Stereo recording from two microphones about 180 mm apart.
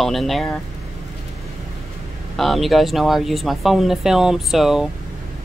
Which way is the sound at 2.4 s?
Centre (ahead or behind).